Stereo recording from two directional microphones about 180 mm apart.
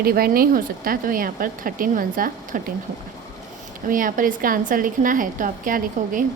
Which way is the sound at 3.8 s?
50° right (ahead or behind).